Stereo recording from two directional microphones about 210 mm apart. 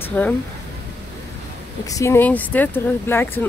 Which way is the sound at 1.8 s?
15° left (ahead or behind).